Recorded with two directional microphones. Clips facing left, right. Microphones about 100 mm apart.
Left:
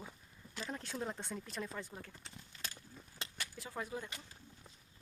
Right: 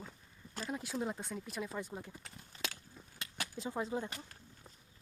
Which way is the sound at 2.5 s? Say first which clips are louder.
Right 6 dB; 35° right (ahead or behind).